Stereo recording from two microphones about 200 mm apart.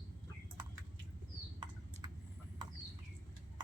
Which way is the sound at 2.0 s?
20° right (ahead or behind).